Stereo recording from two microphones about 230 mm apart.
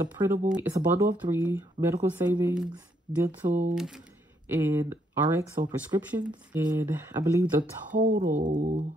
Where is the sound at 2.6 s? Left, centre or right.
Centre.